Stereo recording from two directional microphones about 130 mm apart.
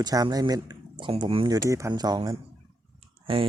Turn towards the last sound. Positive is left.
turn(degrees=-45)  # may be behind; listen again after turning